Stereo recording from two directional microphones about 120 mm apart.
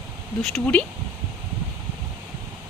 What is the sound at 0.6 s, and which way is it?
Speech, 10° left (ahead or behind).